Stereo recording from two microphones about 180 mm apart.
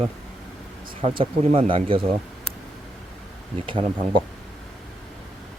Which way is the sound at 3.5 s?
30° right (ahead or behind).